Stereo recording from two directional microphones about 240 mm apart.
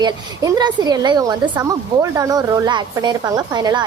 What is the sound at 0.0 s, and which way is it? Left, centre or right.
A woman's voice, centre.